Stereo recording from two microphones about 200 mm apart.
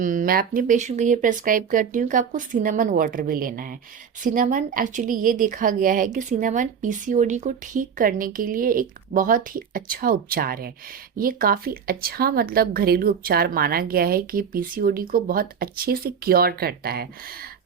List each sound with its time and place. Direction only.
0.0 s a woman's voice: 40° right (ahead or behind)